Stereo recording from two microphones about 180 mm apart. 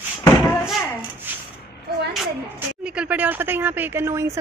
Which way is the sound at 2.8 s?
5° right (ahead or behind).